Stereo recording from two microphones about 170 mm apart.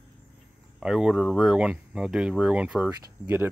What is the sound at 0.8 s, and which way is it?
Speech, 5° right (ahead or behind).